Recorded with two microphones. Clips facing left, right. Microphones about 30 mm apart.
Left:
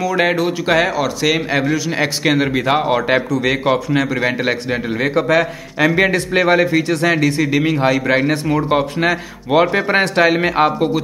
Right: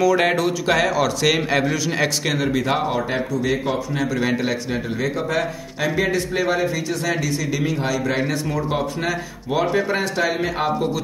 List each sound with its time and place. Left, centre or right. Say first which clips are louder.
0.0 s a man's voice: left 1 dB; centre
2.2 s speech: left 5 dB; left
2.9 s a man's voice: left 7 dB; left
3.3 s a man's voice: left 6 dB; left
4.4 s a man's voice: left 5 dB; left